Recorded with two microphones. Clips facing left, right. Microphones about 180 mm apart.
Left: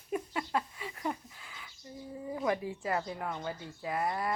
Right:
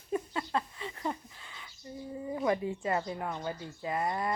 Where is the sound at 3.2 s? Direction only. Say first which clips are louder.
Right 1 dB; 5° right (ahead or behind).